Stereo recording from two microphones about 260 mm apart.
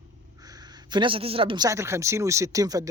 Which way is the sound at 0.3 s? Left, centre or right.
Centre.